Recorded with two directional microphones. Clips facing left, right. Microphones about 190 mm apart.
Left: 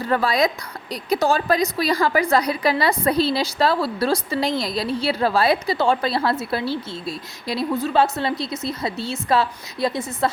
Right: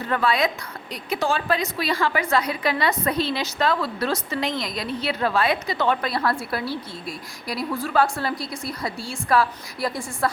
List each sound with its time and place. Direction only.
0.1 s a woman's voice: 35° left (ahead or behind)